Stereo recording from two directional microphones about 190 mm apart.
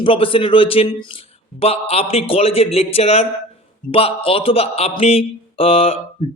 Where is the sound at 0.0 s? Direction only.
30° left (ahead or behind).